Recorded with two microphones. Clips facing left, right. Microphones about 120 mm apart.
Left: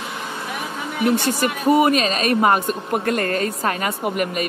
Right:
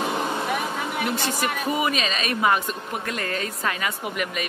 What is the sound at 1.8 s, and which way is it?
A woman's voice, 45° left (ahead or behind).